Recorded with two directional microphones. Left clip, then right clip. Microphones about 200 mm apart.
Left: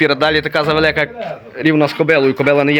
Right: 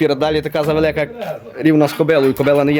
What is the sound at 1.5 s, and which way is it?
Speech, 15° right (ahead or behind).